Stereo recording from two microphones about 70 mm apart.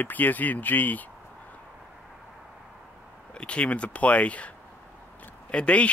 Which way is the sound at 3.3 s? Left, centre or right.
Centre.